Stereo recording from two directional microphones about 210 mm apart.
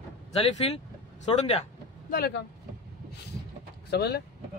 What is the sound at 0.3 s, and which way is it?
A man's voice, 30° left (ahead or behind).